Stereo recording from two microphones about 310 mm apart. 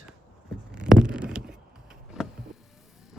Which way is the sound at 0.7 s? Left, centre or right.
Centre.